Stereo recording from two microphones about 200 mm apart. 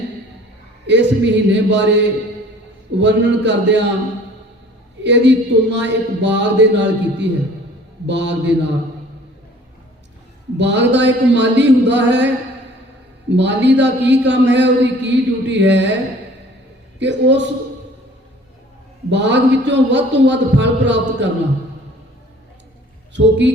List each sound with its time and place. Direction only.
0.9 s a man's voice: 60° right (ahead or behind)
5.0 s a man's voice: 60° right (ahead or behind)
10.6 s a man's voice: 60° right (ahead or behind)
13.3 s a man's voice: 60° right (ahead or behind)
17.0 s a man's voice: 60° right (ahead or behind)
19.1 s a man's voice: 60° right (ahead or behind)
23.1 s a man's voice: 60° right (ahead or behind)